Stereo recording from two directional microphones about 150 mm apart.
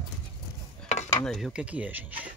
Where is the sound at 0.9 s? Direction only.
50° left (ahead or behind).